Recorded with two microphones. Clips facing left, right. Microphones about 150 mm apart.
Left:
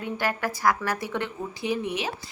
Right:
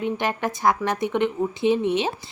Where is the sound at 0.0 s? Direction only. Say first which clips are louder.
Right 4 dB; 20° right (ahead or behind).